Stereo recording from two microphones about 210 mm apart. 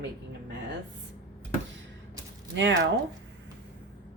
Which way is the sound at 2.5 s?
60° right (ahead or behind).